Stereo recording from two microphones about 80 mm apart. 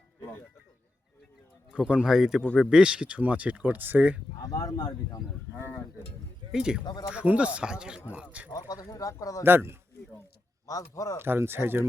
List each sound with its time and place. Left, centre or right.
0.2 s music: left
1.7 s speech: centre
4.5 s speech: left
6.5 s speech: centre
8.5 s speech: left
9.4 s speech: right
10.7 s speech: left
11.2 s speech: right